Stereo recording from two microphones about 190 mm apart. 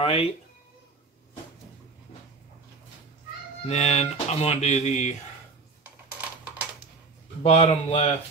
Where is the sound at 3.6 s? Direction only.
35° left (ahead or behind).